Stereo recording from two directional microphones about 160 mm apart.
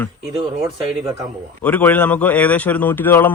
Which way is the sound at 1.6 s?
10° left (ahead or behind).